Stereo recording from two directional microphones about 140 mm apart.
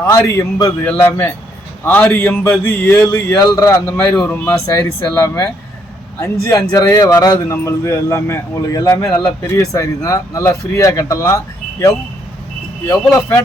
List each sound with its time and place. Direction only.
0.3 s a man's voice: 20° left (ahead or behind)
3.8 s a man's voice: 10° left (ahead or behind)